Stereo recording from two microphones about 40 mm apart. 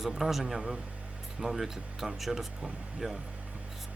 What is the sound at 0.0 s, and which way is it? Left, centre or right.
Speech, centre.